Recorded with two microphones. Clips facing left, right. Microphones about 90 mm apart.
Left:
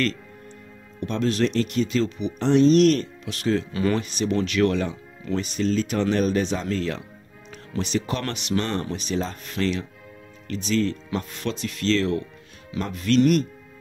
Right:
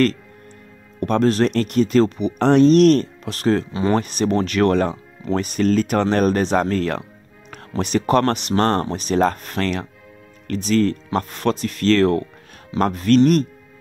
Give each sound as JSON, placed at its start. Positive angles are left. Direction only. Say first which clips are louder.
{"t": 1.0, "sound": "speech", "louder": "right 6 dB", "side_deg": -50}